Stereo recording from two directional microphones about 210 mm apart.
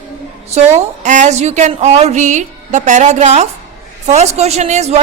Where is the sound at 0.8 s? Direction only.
35° right (ahead or behind).